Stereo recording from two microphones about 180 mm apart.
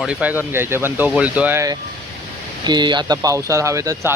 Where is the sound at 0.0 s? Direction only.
5° right (ahead or behind).